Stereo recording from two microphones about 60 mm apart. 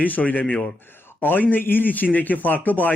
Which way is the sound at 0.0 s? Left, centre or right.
Left.